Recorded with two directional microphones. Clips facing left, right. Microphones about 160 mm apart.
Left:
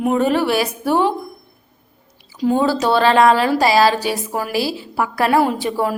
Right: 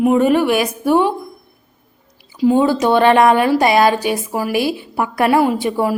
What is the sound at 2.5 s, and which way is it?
Speech, 15° right (ahead or behind).